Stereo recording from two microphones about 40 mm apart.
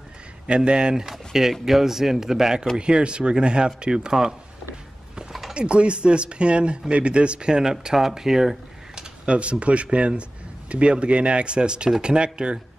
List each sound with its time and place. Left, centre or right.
0.5 s speech: right
2.8 s a man's voice: right
5.5 s a man's voice: right
7.7 s speech: centre
9.2 s a man's voice: right